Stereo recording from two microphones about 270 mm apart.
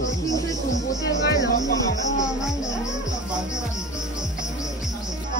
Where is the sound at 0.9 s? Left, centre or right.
Centre.